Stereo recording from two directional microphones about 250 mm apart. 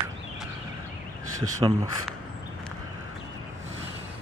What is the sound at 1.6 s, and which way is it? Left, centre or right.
Speech, centre.